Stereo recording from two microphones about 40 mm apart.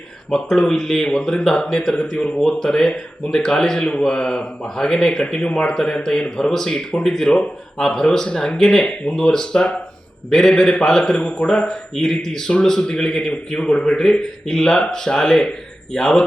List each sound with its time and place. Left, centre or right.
0.3 s speech: centre
8.8 s a man's voice: left